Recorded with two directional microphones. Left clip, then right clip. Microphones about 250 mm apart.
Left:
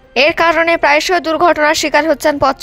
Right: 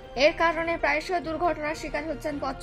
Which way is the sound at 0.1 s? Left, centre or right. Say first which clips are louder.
Left 11 dB; left.